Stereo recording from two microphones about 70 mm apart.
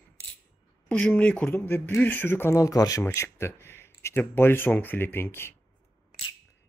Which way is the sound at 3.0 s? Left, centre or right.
Left.